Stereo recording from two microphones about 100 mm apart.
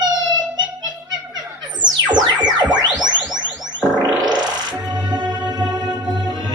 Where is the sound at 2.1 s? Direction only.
45° right (ahead or behind).